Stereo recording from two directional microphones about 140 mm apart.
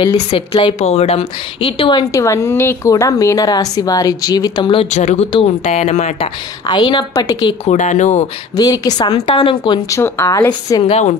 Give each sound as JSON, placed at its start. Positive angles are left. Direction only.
{"t": 0.3, "sound": "a woman's voice", "side_deg": 40}
{"t": 2.1, "sound": "a woman's voice", "side_deg": 20}
{"t": 4.9, "sound": "speech", "side_deg": 55}
{"t": 6.7, "sound": "a woman's voice", "side_deg": 30}
{"t": 7.6, "sound": "speech", "side_deg": 60}
{"t": 8.5, "sound": "a woman's voice", "side_deg": 30}
{"t": 9.1, "sound": "a woman's voice", "side_deg": 45}
{"t": 9.8, "sound": "a woman's voice", "side_deg": 20}
{"t": 10.9, "sound": "speech", "side_deg": 50}